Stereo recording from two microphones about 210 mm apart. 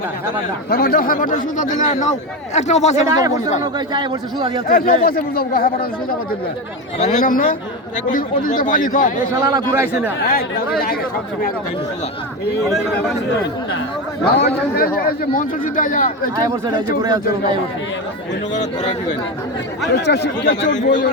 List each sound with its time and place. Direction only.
0.7 s a man's voice: 45° left (ahead or behind)
3.9 s a man's voice: 20° right (ahead or behind)
4.7 s a man's voice: 45° left (ahead or behind)
9.4 s speech: 15° right (ahead or behind)
14.3 s a man's voice: 50° left (ahead or behind)
16.4 s a man's voice: 20° right (ahead or behind)
19.9 s speech: 55° left (ahead or behind)
20.7 s a man's voice: 35° left (ahead or behind)